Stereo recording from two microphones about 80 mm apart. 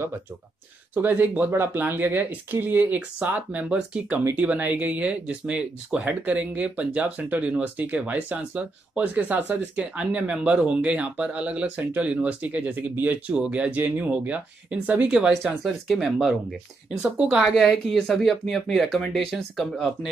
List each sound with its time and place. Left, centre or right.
0.9 s speech: right
13.3 s speech: centre
15.4 s speech: centre